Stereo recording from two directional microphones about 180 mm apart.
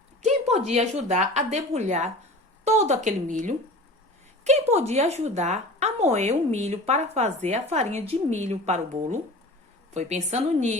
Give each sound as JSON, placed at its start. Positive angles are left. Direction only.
{"t": 0.2, "sound": "a woman's voice", "side_deg": -40}